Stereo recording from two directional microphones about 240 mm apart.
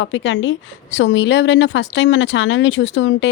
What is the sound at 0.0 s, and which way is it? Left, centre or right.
A woman's voice, left.